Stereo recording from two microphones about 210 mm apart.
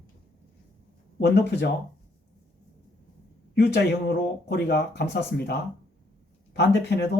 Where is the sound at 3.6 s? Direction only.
50° left (ahead or behind).